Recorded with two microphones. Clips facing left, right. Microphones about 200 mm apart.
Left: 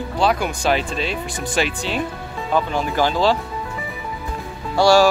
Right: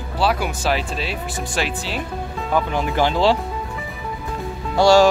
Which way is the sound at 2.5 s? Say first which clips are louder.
Even; 15° right (ahead or behind).